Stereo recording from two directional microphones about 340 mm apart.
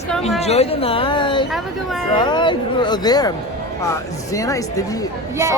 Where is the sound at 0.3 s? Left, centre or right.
Centre.